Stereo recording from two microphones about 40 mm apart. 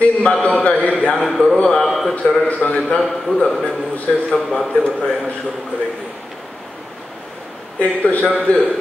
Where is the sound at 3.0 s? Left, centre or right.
Centre.